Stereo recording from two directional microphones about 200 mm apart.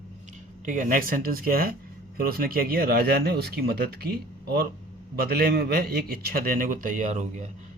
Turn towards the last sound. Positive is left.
turn(degrees=-35)  # may be behind; listen again after turning